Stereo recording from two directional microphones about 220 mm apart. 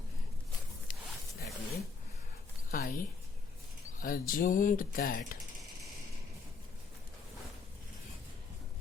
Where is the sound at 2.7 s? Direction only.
40° left (ahead or behind).